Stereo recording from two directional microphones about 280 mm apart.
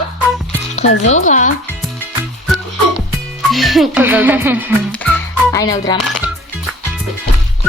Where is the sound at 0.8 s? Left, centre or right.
Left.